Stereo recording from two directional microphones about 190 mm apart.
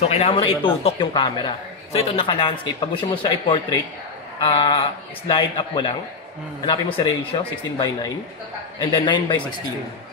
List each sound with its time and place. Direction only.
0.0 s speech: 35° left (ahead or behind)